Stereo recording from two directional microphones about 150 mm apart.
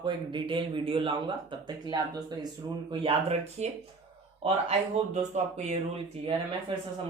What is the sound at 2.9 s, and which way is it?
Speech, 40° right (ahead or behind).